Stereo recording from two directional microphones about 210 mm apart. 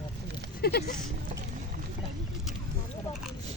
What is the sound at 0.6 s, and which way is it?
Speech, 45° left (ahead or behind).